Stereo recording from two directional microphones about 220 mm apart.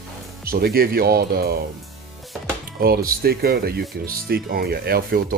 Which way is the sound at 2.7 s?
45° right (ahead or behind).